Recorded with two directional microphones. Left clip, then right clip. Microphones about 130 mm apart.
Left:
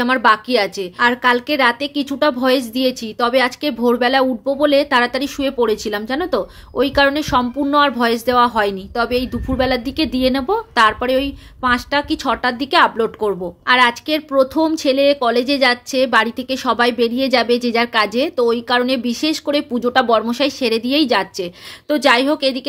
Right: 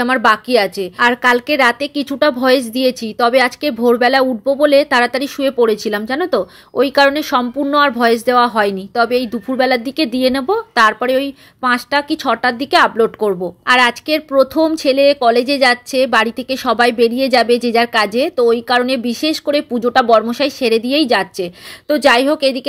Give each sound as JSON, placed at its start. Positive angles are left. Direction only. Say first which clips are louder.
{"t": 0.0, "sound": "a woman's voice", "louder": "right 1 dB", "side_deg": -30}